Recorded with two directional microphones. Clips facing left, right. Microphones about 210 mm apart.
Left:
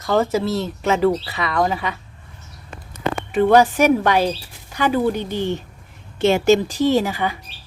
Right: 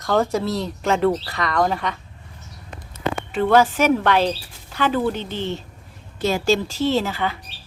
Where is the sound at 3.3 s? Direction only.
15° left (ahead or behind).